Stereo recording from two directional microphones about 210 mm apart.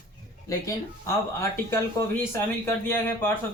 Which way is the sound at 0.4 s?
15° left (ahead or behind).